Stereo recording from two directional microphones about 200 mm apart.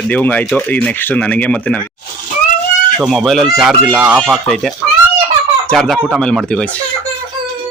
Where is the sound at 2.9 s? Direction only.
Centre (ahead or behind).